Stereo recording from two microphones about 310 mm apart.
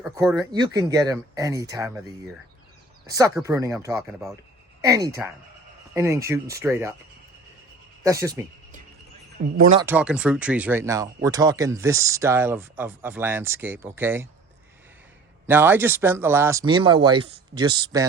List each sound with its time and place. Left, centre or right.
0.0 s speech: centre
3.1 s speech: centre
8.0 s speech: centre
9.4 s speech: right
9.8 s speech: centre
15.4 s speech: centre